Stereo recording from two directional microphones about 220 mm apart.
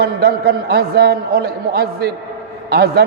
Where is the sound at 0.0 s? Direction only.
45° right (ahead or behind).